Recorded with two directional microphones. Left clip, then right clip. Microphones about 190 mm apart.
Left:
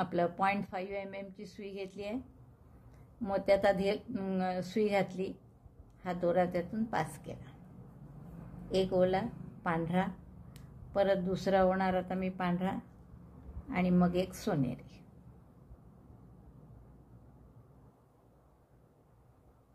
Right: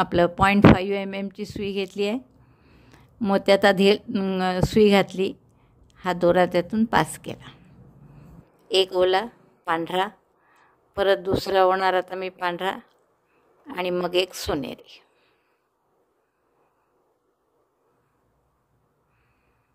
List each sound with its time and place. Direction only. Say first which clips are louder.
0.0 s speech: right 12 dB; 45° right (ahead or behind)
8.6 s a woman's voice: right 10 dB; 45° right (ahead or behind)